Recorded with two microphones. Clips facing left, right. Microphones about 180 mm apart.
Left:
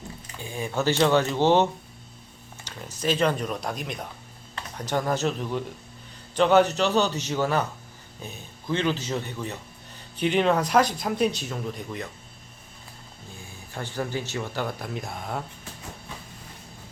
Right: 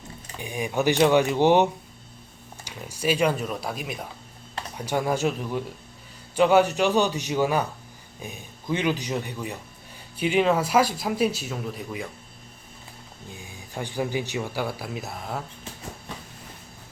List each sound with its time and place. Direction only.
0.3 s speech: 15° right (ahead or behind)
13.7 s speech: 15° right (ahead or behind)